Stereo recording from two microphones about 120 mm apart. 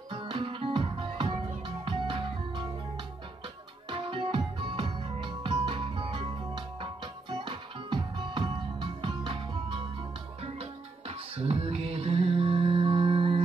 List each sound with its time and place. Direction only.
0.1 s music: 45° right (ahead or behind)
3.9 s music: 45° right (ahead or behind)
10.4 s music: 55° right (ahead or behind)